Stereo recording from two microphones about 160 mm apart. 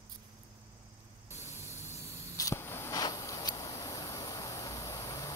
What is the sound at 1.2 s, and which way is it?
Static, 15° right (ahead or behind).